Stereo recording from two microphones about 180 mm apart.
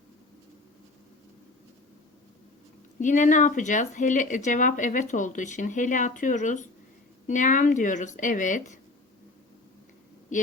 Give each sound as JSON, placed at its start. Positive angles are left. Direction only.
{"t": 3.0, "sound": "speech", "side_deg": 45}